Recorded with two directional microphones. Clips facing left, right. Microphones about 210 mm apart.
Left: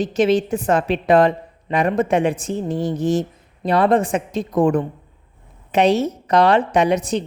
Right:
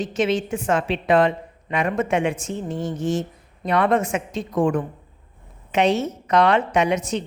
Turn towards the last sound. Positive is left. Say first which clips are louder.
# left 3 dB
turn(degrees=35)  # may be behind; listen again after turning